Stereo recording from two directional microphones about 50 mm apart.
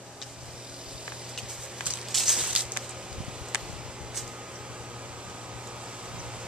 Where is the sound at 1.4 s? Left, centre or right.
Centre.